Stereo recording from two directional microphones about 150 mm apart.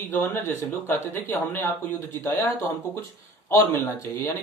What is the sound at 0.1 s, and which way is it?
Speech, 15° left (ahead or behind).